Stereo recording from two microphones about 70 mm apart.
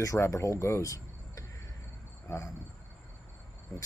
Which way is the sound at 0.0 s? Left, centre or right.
Left.